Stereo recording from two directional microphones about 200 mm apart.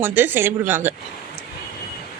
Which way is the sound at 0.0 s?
10° right (ahead or behind).